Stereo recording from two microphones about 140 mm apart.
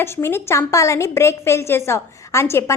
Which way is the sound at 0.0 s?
15° left (ahead or behind).